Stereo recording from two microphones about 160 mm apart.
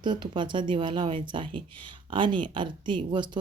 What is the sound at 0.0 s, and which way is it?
Speech, 30° right (ahead or behind).